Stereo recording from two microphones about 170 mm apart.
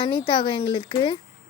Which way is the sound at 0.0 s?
30° left (ahead or behind).